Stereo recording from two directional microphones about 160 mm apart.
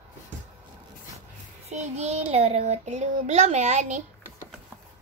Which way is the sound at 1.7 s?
45° right (ahead or behind).